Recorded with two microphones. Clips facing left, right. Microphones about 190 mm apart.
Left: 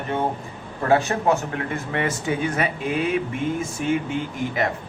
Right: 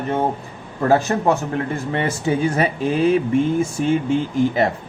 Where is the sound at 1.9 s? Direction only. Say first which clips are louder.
Right 3 dB; 30° right (ahead or behind).